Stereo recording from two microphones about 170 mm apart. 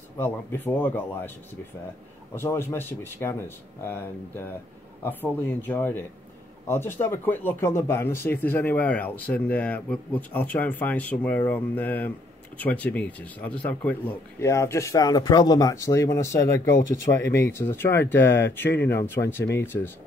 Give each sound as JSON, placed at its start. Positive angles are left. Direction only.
{"t": 0.2, "sound": "speech", "side_deg": 10}
{"t": 2.3, "sound": "speech", "side_deg": 15}